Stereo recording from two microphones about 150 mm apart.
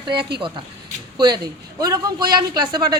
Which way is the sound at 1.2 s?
30° right (ahead or behind).